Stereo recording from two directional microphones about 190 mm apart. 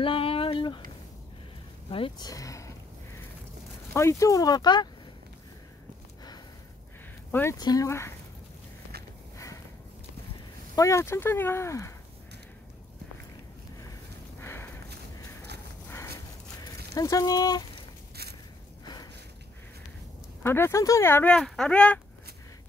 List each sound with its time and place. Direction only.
0.0 s a sound: 30° left (ahead or behind)
1.9 s speech: 30° left (ahead or behind)
3.9 s speech: 15° left (ahead or behind)
7.2 s speech: 10° left (ahead or behind)
7.5 s speech: 20° left (ahead or behind)
10.8 s speech: 15° left (ahead or behind)
14.4 s a sound: 15° left (ahead or behind)
16.9 s speech: 15° left (ahead or behind)
20.4 s speech: 10° left (ahead or behind)